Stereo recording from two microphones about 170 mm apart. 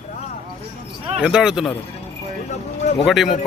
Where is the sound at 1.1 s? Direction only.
5° right (ahead or behind).